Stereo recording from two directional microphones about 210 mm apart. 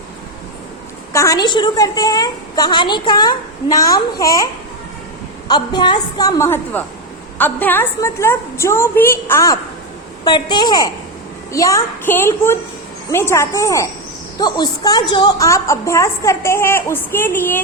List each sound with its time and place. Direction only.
1.1 s a woman's voice: 15° left (ahead or behind)
5.5 s a woman's voice: 20° left (ahead or behind)